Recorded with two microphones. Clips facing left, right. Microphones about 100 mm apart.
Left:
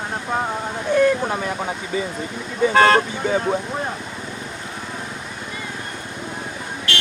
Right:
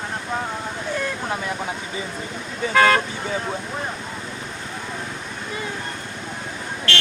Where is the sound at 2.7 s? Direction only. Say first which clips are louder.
Left 2 dB; 40° left (ahead or behind).